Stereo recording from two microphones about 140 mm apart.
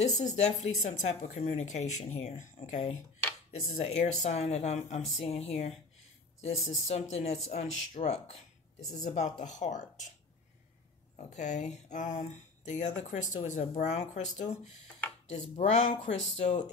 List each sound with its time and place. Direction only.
0.0 s speech: 55° left (ahead or behind)
3.8 s speech: 50° left (ahead or behind)
11.1 s speech: 60° left (ahead or behind)